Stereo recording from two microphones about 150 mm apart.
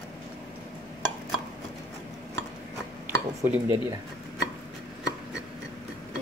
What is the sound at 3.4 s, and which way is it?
Speech, 15° right (ahead or behind).